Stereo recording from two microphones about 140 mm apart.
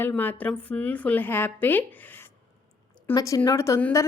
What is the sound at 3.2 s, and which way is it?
Speech, 25° left (ahead or behind).